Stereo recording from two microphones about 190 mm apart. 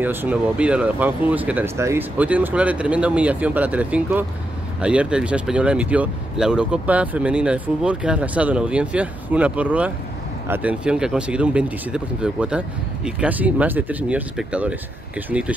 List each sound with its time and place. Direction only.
0.0 s speech: 10° right (ahead or behind)